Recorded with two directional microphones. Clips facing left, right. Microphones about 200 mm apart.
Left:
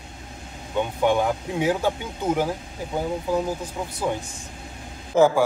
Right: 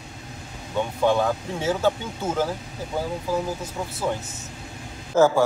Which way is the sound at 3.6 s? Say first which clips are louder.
Even; 15° left (ahead or behind).